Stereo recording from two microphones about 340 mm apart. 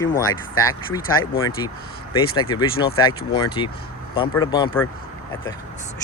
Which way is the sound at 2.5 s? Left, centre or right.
Centre.